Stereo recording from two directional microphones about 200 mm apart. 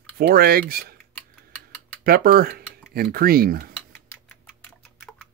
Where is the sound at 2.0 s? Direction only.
50° right (ahead or behind).